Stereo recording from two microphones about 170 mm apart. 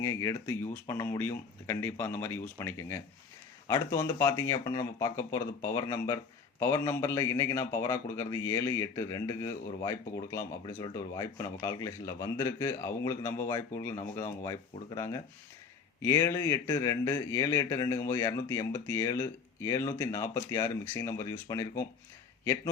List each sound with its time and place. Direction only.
0.0 s a man's voice: 20° left (ahead or behind)